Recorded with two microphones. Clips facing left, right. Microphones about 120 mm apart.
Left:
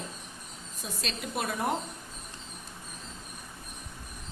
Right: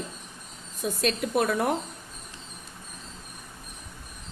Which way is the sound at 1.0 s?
50° right (ahead or behind).